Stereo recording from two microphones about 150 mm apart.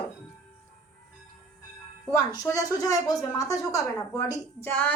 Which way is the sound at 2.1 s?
20° left (ahead or behind).